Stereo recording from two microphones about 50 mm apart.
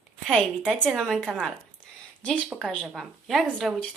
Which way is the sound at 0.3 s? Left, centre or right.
Centre.